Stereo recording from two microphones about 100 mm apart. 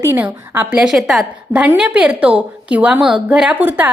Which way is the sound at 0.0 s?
20° right (ahead or behind).